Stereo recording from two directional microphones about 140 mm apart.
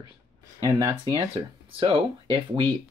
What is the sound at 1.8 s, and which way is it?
Speech, 40° right (ahead or behind).